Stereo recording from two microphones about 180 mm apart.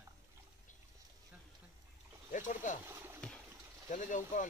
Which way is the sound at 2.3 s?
45° left (ahead or behind).